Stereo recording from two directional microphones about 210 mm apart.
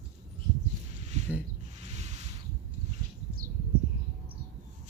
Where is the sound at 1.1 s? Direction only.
35° right (ahead or behind).